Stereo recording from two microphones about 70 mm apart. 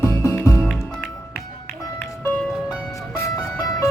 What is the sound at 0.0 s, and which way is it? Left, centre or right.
Music, left.